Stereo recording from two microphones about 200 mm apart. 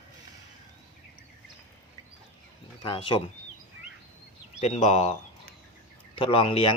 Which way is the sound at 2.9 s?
25° left (ahead or behind).